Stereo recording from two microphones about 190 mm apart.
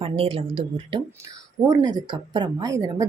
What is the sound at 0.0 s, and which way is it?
A woman's voice, 30° right (ahead or behind).